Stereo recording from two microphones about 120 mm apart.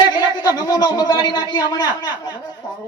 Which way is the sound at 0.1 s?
35° left (ahead or behind).